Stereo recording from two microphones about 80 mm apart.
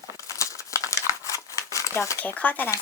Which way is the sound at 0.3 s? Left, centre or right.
Left.